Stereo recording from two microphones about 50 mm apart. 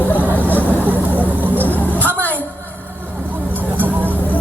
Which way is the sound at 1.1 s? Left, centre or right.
Right.